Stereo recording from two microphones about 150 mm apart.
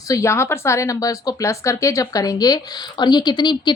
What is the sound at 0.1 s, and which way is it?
A woman's voice, 20° left (ahead or behind).